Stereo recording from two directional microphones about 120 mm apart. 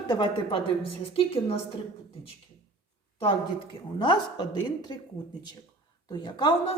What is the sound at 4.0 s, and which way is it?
Speech, 40° left (ahead or behind).